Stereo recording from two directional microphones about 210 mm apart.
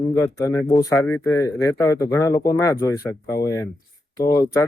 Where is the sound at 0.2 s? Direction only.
15° left (ahead or behind).